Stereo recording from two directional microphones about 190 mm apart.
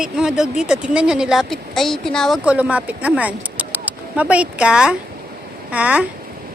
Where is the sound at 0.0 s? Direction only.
5° right (ahead or behind).